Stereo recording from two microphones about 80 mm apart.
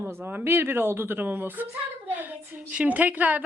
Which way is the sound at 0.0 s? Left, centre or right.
Right.